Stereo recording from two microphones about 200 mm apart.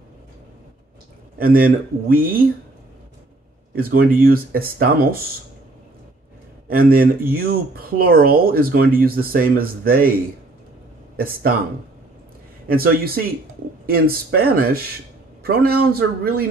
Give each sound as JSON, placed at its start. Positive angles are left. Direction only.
{"t": 1.4, "sound": "speech", "side_deg": -45}
{"t": 3.7, "sound": "speech", "side_deg": -45}
{"t": 6.7, "sound": "speech", "side_deg": -45}
{"t": 12.6, "sound": "speech", "side_deg": -50}